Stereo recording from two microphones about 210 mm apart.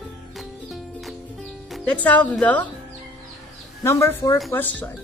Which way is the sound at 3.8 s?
10° left (ahead or behind).